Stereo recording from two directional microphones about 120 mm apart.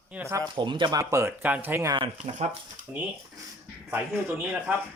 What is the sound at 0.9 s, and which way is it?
Speech, 25° right (ahead or behind).